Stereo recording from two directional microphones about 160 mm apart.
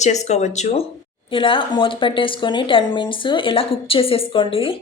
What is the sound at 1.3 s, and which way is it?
Speech, 35° left (ahead or behind).